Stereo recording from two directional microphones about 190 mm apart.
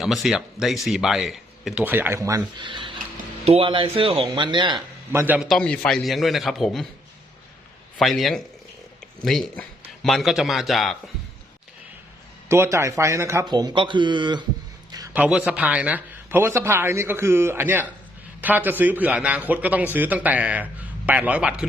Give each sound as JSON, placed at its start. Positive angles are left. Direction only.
{"t": 0.0, "sound": "speech", "side_deg": 0}
{"t": 5.2, "sound": "speech", "side_deg": -5}
{"t": 7.9, "sound": "speech", "side_deg": 0}
{"t": 12.5, "sound": "speech", "side_deg": -15}
{"t": 14.9, "sound": "speech", "side_deg": -10}